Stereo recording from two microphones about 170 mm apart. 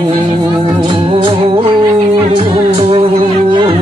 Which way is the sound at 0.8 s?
25° right (ahead or behind).